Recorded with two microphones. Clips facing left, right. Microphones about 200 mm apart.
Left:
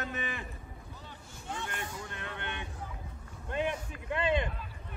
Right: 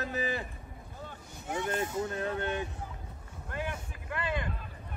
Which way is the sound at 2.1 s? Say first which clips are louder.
Right 9 dB; 40° right (ahead or behind).